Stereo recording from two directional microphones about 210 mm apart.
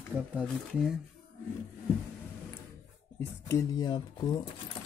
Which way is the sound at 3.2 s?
15° left (ahead or behind).